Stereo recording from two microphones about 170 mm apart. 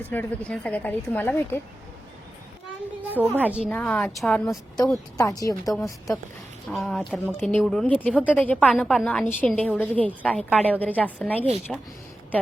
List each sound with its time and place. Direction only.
0.0 s a woman's voice: 10° left (ahead or behind)
3.1 s a woman's voice: 10° right (ahead or behind)
3.7 s a woman's voice: 5° left (ahead or behind)
4.8 s speech: 20° left (ahead or behind)
6.7 s a woman's voice: centre (ahead or behind)